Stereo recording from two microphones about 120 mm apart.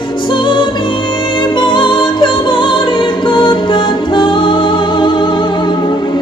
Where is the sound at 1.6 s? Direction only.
40° left (ahead or behind).